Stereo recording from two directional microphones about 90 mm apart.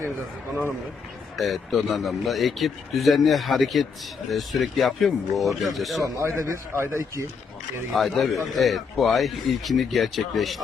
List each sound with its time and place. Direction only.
1.4 s speech: centre (ahead or behind)
6.0 s a man's voice: 35° right (ahead or behind)
7.9 s speech: centre (ahead or behind)